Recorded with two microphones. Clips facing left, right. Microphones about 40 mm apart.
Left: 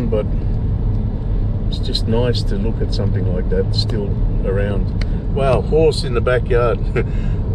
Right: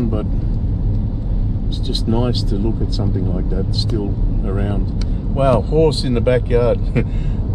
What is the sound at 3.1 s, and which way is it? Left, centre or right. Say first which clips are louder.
Speech: left 2 dB; left.